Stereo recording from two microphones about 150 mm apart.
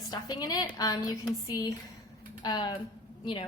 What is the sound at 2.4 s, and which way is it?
Speech, 30° left (ahead or behind).